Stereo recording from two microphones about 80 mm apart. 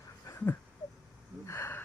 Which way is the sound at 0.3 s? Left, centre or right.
Left.